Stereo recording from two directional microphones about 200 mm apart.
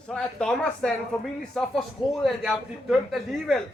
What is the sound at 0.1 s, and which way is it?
Speech, 5° left (ahead or behind).